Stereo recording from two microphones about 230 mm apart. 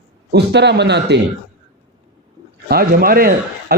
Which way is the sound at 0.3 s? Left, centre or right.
Right.